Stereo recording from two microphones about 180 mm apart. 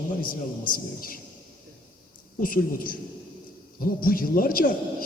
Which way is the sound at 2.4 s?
50° left (ahead or behind).